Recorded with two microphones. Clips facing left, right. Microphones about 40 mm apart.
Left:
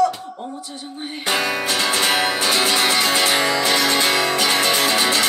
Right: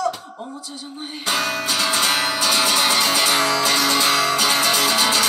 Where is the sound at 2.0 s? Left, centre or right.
Left.